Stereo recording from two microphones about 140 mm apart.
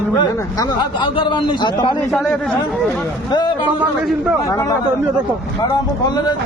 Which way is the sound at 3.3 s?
30° left (ahead or behind).